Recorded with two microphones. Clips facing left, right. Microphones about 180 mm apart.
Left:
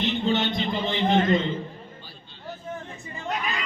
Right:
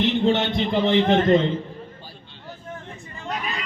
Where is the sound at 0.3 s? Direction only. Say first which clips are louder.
Right 4 dB; 70° right (ahead or behind).